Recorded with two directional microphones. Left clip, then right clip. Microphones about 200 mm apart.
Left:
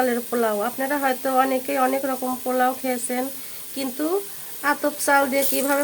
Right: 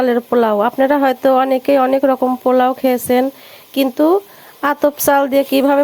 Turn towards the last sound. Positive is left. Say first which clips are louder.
# right 9 dB
turn(degrees=-35)  # may be behind; listen again after turning